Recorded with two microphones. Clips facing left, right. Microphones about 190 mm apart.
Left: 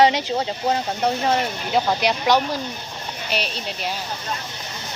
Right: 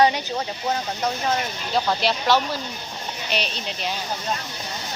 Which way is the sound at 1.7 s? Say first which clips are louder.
Left 2 dB; 15° left (ahead or behind).